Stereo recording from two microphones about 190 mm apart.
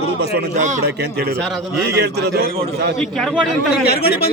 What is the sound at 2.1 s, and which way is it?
Speech, 55° right (ahead or behind).